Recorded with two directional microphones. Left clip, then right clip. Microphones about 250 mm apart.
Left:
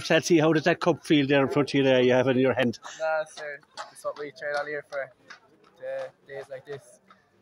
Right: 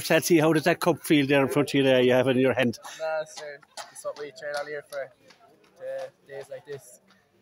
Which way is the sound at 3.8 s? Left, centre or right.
Right.